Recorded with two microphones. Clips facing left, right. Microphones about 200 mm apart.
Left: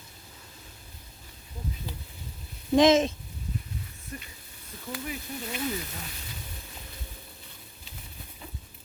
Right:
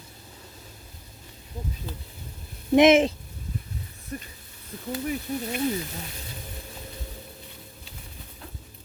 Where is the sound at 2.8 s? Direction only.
25° right (ahead or behind).